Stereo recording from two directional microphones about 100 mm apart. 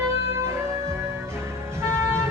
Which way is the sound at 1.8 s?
25° right (ahead or behind).